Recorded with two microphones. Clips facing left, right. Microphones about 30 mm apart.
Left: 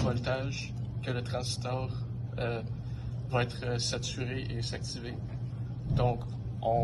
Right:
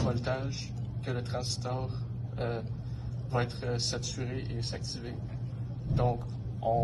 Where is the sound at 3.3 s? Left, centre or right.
Left.